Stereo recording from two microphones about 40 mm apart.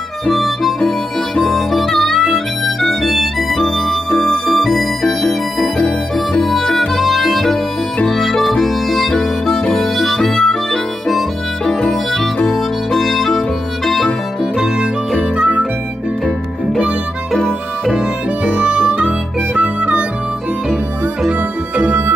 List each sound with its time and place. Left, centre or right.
0.3 s harmonica: centre
3.4 s music: centre
7.0 s music: centre
8.1 s harmonica: centre
11.9 s music: centre
13.8 s harmonica: centre
15.3 s harmonica: right
18.4 s harmonica: right